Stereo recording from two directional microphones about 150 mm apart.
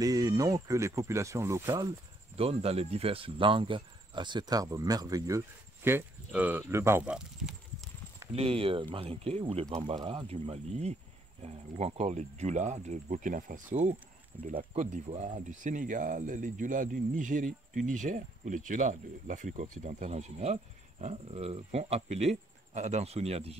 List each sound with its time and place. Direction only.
0.0 s speech: 25° right (ahead or behind)
2.3 s speech: 40° right (ahead or behind); by 7.1 s 15° right (ahead or behind)
7.1 s a sound: 5° right (ahead or behind)
8.3 s speech: 40° right (ahead or behind)
9.7 s speech: 30° right (ahead or behind); by 13.9 s 55° right (ahead or behind)
14.5 s speech: 35° right (ahead or behind)
14.8 s speech: 55° right (ahead or behind)